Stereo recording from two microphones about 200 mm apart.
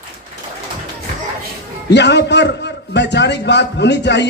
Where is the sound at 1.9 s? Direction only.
60° left (ahead or behind).